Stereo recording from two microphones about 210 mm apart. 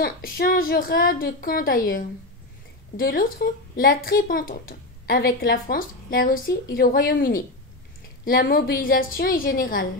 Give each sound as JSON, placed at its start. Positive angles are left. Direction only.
{"t": 0.0, "sound": "speech", "side_deg": 45}